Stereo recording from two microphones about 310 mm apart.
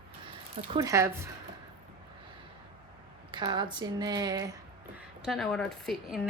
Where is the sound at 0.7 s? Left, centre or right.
Centre.